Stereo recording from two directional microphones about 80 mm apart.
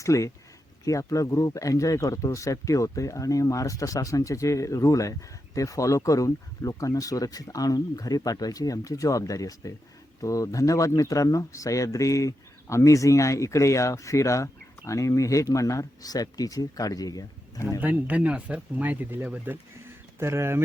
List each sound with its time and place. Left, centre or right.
0.0 s speech: left
17.7 s speech: centre